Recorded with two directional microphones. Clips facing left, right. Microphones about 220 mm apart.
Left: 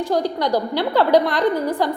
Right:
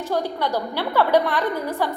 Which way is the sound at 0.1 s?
15° left (ahead or behind).